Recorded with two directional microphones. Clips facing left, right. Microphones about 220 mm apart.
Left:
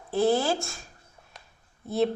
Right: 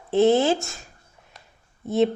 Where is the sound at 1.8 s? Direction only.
20° right (ahead or behind).